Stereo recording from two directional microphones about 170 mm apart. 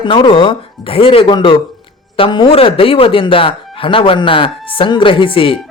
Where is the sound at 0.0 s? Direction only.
30° left (ahead or behind).